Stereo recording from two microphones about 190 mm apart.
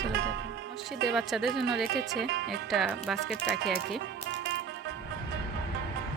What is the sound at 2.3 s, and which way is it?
Music, 65° right (ahead or behind).